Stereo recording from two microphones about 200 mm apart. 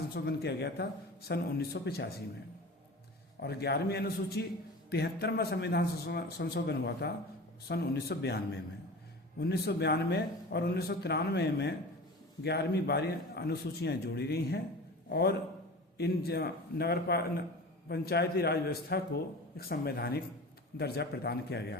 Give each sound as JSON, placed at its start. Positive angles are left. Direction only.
{"t": 0.1, "sound": "speech", "side_deg": 55}
{"t": 3.4, "sound": "a man's voice", "side_deg": 55}
{"t": 9.4, "sound": "a man's voice", "side_deg": 55}